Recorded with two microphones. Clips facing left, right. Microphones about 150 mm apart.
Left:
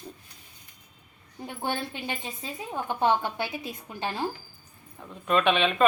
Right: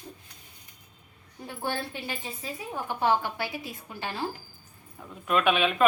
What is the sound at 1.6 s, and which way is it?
A woman's voice, 20° left (ahead or behind).